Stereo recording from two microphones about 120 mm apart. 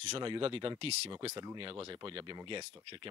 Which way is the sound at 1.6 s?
40° right (ahead or behind).